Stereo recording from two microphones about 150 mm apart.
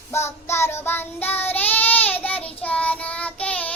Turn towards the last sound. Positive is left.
turn(degrees=10)  # may be behind; listen again after turning